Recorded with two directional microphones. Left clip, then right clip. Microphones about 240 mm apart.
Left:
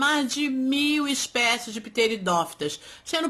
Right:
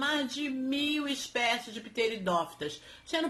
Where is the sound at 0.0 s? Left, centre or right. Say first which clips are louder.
Left 8 dB; left.